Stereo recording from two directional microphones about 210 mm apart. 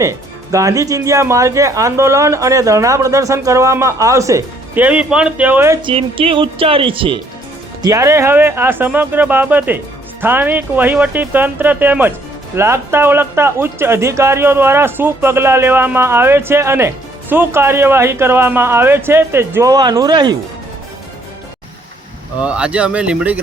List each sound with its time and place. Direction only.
0.0 s speech: 15° right (ahead or behind)
5.9 s speech: 25° right (ahead or behind)
22.4 s speech: 5° right (ahead or behind)